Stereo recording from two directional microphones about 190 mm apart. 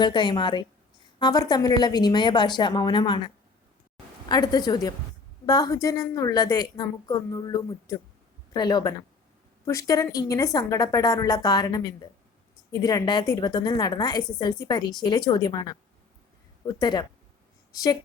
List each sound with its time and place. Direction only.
0.0 s a woman's voice: 25° left (ahead or behind)
16.8 s a woman's voice: 20° left (ahead or behind)